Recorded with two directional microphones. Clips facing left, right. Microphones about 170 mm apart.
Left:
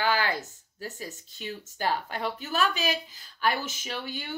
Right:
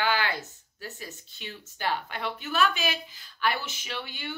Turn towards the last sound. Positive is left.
turn(degrees=40)  # may be behind; listen again after turning